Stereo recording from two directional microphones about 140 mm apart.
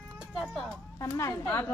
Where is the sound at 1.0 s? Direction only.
20° left (ahead or behind).